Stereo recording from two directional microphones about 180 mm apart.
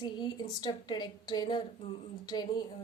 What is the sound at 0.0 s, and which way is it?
Speech, 25° left (ahead or behind).